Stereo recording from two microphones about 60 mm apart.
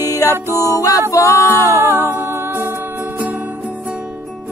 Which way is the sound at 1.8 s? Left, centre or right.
Right.